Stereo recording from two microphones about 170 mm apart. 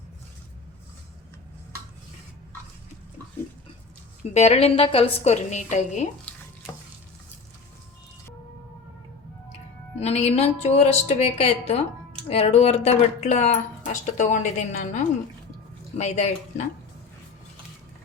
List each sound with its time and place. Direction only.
4.4 s a woman's voice: 40° left (ahead or behind)
6.3 s a sound: 5° left (ahead or behind)
10.0 s a woman's voice: 40° left (ahead or behind)